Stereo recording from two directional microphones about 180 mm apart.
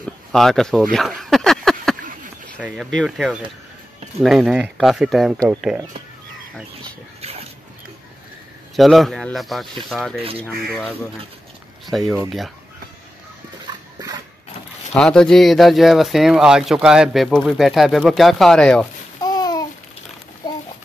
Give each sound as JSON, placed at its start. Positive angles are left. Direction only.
{"t": 0.0, "sound": "speech", "side_deg": 0}
{"t": 0.9, "sound": "a sound", "side_deg": 0}
{"t": 2.6, "sound": "speech", "side_deg": -5}
{"t": 7.2, "sound": "dog", "side_deg": -35}
{"t": 8.7, "sound": "speech", "side_deg": 0}
{"t": 13.7, "sound": "dog", "side_deg": -25}
{"t": 15.0, "sound": "speech", "side_deg": 5}
{"t": 19.1, "sound": "babbling", "side_deg": 20}